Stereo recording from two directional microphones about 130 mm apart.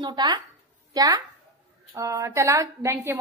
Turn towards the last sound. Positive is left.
turn(degrees=-20)  # may be behind; listen again after turning